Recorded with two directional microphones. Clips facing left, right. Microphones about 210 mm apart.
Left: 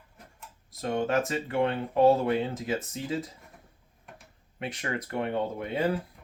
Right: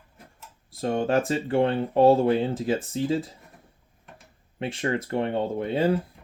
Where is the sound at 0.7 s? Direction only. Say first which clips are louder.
Right 4 dB; 30° right (ahead or behind).